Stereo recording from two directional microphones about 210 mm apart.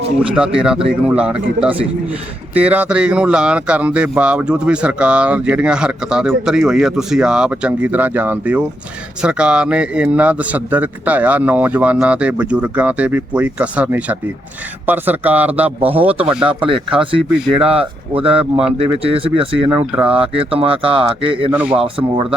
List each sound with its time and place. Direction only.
0.2 s a man's voice: 5° right (ahead or behind)
16.6 s speech: 25° right (ahead or behind)
21.5 s a man's voice: 5° right (ahead or behind)
21.8 s speech: 25° right (ahead or behind)